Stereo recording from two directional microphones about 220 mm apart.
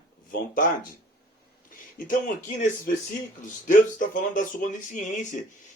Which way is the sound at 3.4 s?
35° left (ahead or behind).